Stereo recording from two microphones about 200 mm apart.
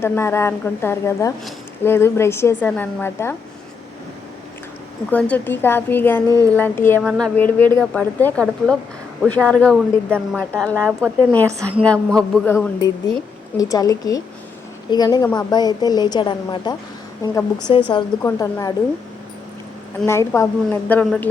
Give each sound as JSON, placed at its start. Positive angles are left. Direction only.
{"t": 0.0, "sound": "a woman's voice", "side_deg": 10}
{"t": 5.1, "sound": "a woman's voice", "side_deg": 5}
{"t": 7.0, "sound": "a woman's voice", "side_deg": 0}
{"t": 13.6, "sound": "a woman's voice", "side_deg": 15}
{"t": 20.1, "sound": "a woman's voice", "side_deg": 15}